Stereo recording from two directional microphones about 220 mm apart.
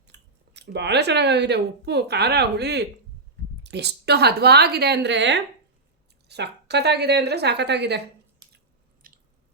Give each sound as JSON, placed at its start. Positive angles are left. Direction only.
{"t": 0.1, "sound": "a woman's voice", "side_deg": -50}
{"t": 9.0, "sound": "squish", "side_deg": -40}